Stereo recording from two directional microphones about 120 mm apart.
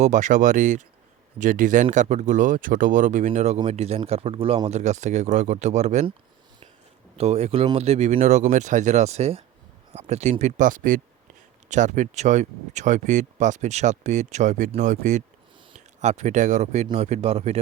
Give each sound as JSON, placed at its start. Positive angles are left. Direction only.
{"t": 0.0, "sound": "speech", "side_deg": -90}
{"t": 3.7, "sound": "speech", "side_deg": -60}
{"t": 7.2, "sound": "speech", "side_deg": -60}
{"t": 16.0, "sound": "speech", "side_deg": -75}